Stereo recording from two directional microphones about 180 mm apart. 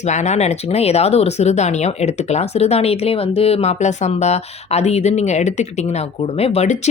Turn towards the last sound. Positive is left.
turn(degrees=40)  # may be behind; listen again after turning